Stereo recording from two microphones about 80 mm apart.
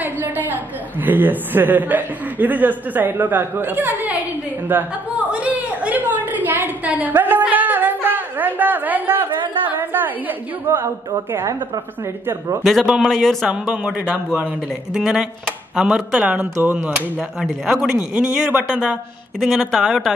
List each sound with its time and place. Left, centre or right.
0.0 s a woman's voice: right
5.3 s a sound: centre
9.7 s a woman's voice: right
13.0 s speech: centre
13.9 s a woman's voice: centre
15.0 s speech: centre
16.1 s a woman's voice: centre
17.4 s speech: centre
18.1 s a woman's voice: centre
19.4 s speech: centre